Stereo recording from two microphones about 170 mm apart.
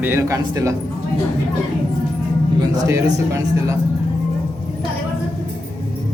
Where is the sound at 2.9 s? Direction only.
15° right (ahead or behind).